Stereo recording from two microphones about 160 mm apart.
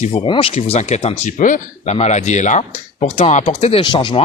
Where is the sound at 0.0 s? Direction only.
40° left (ahead or behind).